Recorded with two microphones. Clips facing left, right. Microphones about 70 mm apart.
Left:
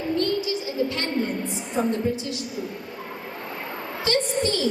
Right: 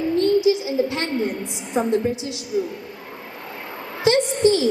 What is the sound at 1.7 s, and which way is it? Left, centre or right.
Speech, centre.